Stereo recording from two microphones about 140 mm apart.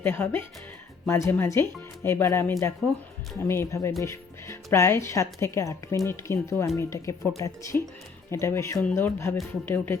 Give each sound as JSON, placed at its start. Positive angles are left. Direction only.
{"t": 0.0, "sound": "speech", "side_deg": 15}